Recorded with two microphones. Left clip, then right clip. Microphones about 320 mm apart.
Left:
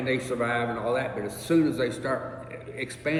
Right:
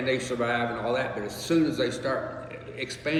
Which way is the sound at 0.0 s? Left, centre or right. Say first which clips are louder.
Even; left.